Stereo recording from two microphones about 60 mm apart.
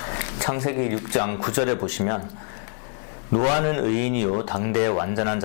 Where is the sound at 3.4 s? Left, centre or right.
Centre.